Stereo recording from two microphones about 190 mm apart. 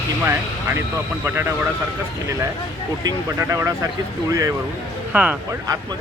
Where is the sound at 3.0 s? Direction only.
15° right (ahead or behind).